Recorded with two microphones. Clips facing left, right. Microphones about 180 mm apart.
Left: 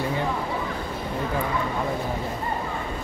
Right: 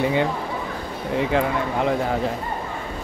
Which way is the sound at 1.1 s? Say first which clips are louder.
Right 7 dB; 85° right.